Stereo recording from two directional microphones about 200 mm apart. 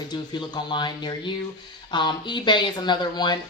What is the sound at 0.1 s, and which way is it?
Speech, 20° left (ahead or behind).